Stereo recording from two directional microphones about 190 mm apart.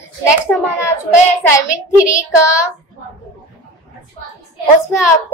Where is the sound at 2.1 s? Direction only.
15° left (ahead or behind).